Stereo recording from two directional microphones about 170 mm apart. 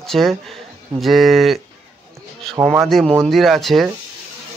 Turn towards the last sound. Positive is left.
turn(degrees=0)  # may be behind; listen again after turning